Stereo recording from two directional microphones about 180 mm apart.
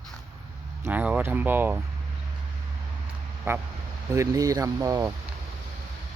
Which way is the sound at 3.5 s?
15° right (ahead or behind).